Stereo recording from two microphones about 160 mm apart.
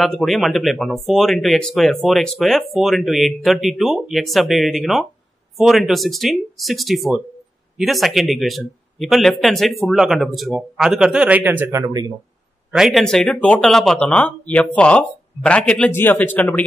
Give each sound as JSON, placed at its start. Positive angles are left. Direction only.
{"t": 0.0, "sound": "speech", "side_deg": 0}
{"t": 11.8, "sound": "speech", "side_deg": -25}
{"t": 12.7, "sound": "speech", "side_deg": 0}